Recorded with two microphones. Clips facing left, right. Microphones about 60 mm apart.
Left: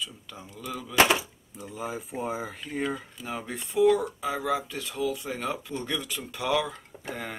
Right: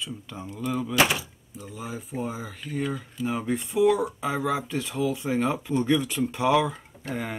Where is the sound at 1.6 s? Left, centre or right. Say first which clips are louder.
Left 2 dB; centre.